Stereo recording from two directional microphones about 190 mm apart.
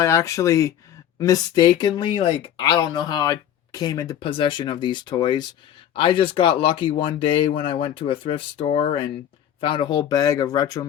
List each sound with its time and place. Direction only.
0.0 s speech: 15° left (ahead or behind)